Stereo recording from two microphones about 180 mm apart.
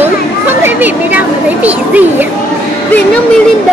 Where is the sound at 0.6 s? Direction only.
10° right (ahead or behind).